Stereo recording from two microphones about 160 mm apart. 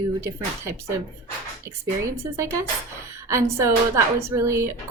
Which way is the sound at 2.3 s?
20° right (ahead or behind).